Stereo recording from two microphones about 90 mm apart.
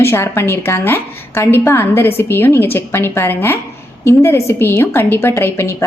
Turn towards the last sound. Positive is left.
turn(degrees=30)  # may be behind; listen again after turning